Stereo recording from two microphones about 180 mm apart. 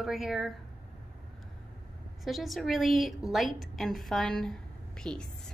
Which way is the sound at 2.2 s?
Centre (ahead or behind).